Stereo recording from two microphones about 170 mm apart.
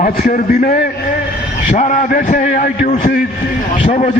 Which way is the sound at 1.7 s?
45° left (ahead or behind).